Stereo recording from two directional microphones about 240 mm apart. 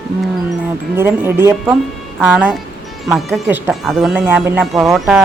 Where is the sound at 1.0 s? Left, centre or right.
Centre.